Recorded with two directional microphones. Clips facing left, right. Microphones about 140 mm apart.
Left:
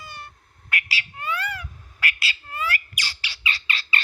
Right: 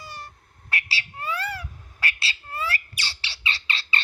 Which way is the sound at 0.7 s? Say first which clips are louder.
Left 1 dB; 30° right (ahead or behind).